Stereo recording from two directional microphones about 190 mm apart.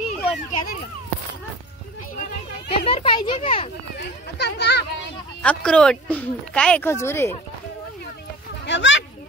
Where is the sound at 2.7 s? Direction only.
30° left (ahead or behind).